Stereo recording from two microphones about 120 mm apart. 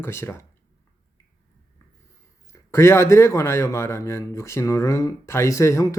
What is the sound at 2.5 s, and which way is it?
Speech, 25° left (ahead or behind).